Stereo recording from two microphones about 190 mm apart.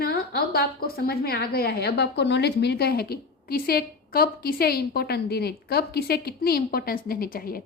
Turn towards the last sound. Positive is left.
turn(degrees=50)  # may be behind; listen again after turning